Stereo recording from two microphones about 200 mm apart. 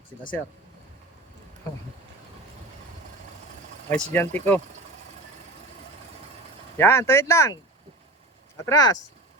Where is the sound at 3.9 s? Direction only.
10° left (ahead or behind).